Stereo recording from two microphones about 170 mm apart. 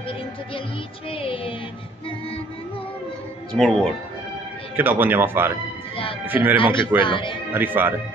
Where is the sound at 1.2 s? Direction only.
30° left (ahead or behind).